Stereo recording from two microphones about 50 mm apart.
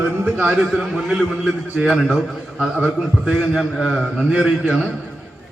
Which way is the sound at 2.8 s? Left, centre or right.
Centre.